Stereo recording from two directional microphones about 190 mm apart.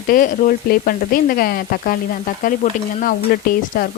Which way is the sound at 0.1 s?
45° left (ahead or behind).